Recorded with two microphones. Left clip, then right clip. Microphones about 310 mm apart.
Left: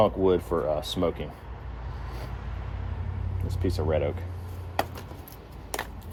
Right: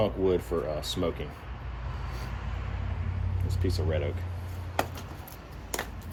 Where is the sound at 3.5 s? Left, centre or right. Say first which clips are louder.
Left 4 dB; centre.